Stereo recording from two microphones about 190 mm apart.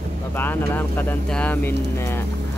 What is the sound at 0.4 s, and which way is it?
Speech, 10° left (ahead or behind).